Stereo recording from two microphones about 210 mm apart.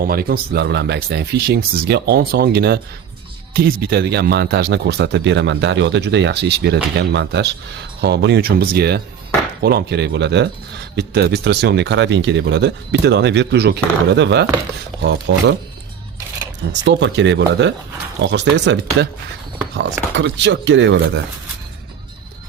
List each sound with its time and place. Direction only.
0.0 s speech: 45° right (ahead or behind)
16.8 s speech: 60° right (ahead or behind)